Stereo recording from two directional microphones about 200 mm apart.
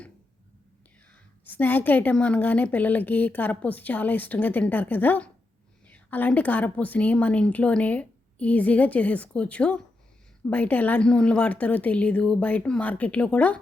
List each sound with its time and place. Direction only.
1.1 s a woman's voice: 10° left (ahead or behind)